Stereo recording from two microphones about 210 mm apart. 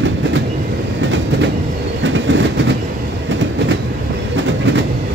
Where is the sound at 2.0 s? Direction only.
60° right (ahead or behind).